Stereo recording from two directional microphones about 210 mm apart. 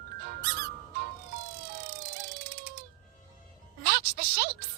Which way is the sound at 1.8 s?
45° right (ahead or behind).